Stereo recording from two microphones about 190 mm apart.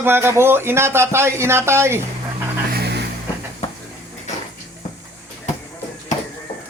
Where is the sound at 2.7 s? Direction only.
60° right (ahead or behind).